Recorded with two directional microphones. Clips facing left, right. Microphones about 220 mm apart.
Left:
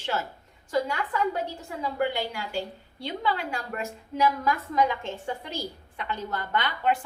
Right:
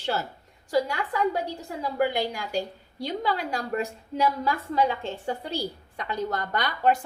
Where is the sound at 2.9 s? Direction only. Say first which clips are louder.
Right 2 dB; 40° right (ahead or behind).